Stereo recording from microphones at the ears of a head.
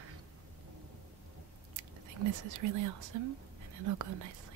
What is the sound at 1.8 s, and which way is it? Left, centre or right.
Speech, right.